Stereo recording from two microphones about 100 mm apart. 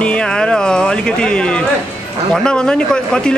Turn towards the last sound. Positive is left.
turn(degrees=10)  # may be behind; listen again after turning